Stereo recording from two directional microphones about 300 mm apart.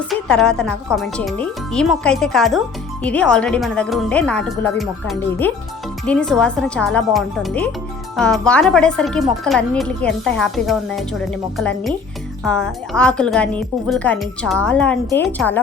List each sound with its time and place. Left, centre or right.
0.1 s speech: centre